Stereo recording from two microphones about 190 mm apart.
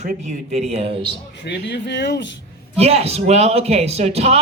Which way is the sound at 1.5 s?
65° left (ahead or behind).